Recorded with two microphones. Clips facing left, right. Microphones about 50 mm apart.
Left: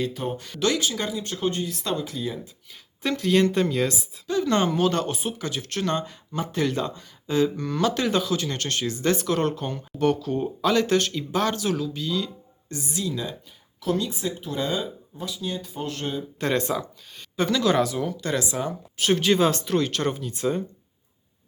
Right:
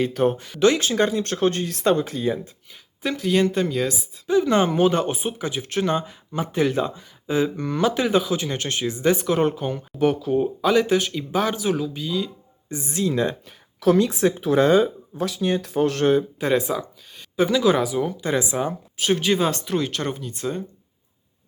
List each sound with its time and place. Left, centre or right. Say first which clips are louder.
0.1 s speech: right 9 dB; right
0.3 s speech: even; centre
0.8 s speech: right 6 dB; right
1.1 s speech: right 5 dB; right
2.0 s speech: right 6 dB; right
3.0 s speech: even; centre
4.3 s speech: right 4 dB; centre
7.9 s speech: right 4 dB; centre
12.8 s speech: right 7 dB; right
14.0 s speech: right 9 dB; right
15.2 s speech: right 8 dB; right
16.4 s speech: right 3 dB; centre
18.9 s speech: even; centre